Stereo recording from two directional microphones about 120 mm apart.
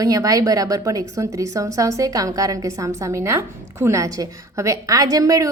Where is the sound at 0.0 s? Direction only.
30° right (ahead or behind).